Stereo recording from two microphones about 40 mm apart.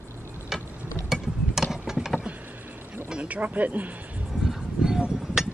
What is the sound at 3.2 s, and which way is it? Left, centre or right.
Speech, right.